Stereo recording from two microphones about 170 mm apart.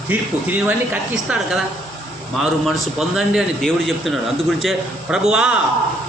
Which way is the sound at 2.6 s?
5° right (ahead or behind).